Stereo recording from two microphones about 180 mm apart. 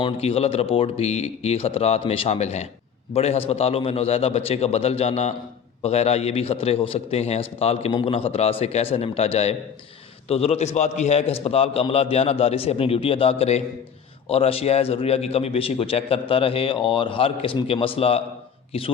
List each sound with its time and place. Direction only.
0.0 s a man's voice: 35° left (ahead or behind)